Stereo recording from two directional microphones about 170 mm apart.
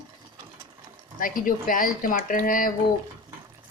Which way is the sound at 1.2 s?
55° left (ahead or behind).